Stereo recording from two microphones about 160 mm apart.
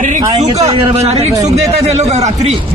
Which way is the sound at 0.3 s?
40° right (ahead or behind).